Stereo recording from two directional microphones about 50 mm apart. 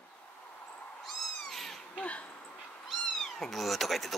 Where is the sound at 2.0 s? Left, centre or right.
Left.